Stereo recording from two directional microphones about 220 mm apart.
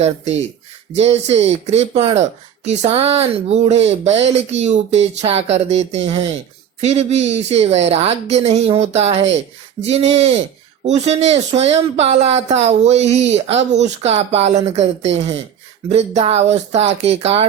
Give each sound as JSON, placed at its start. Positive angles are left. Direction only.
{"t": 0.9, "sound": "speech", "side_deg": -30}